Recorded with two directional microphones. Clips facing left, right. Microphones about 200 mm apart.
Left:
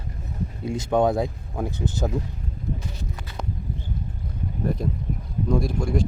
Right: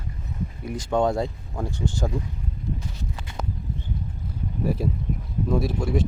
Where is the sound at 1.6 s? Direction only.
20° left (ahead or behind).